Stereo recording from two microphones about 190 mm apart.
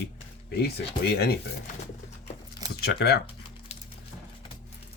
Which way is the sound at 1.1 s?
55° left (ahead or behind).